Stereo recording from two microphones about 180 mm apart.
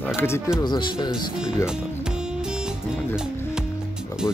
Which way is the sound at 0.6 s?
25° left (ahead or behind).